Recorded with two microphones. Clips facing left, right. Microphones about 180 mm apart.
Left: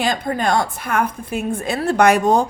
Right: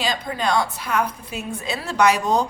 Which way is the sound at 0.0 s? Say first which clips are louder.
Left 4 dB; 50° left (ahead or behind).